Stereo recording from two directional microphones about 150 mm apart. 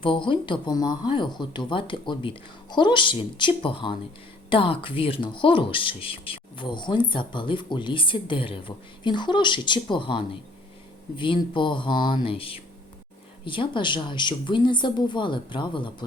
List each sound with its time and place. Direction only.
0.0 s speech: 35° left (ahead or behind)
11.5 s speech: 35° left (ahead or behind)